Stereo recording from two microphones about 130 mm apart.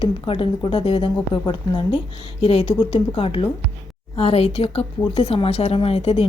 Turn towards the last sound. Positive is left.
turn(degrees=45)  # may be behind; listen again after turning